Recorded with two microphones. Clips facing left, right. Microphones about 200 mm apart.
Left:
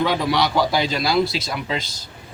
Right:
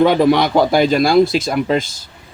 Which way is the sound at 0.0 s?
50° right (ahead or behind).